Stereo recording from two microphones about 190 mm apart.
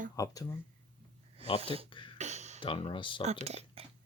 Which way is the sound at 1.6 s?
30° right (ahead or behind).